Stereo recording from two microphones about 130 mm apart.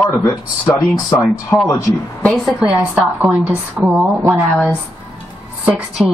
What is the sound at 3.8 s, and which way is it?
Speech, centre (ahead or behind).